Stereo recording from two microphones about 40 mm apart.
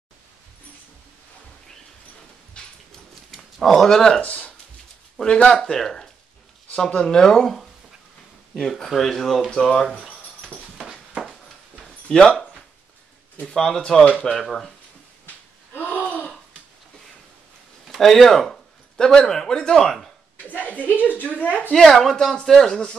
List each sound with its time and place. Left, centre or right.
2.6 s a sound: left
3.5 s speech: centre
4.2 s speech: left
5.2 s speech: left; by 9.5 s centre
9.5 s speech: centre
10.6 s a sound: centre
12.1 s speech: centre
15.2 s gasp: left
16.0 s a sound: left
17.8 s speech: centre
20.5 s a woman's voice: left
21.7 s speech: centre